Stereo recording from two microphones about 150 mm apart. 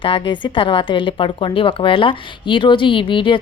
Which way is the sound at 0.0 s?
35° left (ahead or behind).